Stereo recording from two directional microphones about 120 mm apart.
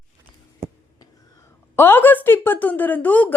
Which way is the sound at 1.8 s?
20° left (ahead or behind).